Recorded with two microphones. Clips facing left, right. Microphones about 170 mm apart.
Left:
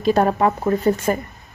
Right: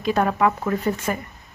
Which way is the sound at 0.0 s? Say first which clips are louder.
Left 3 dB; 35° left (ahead or behind).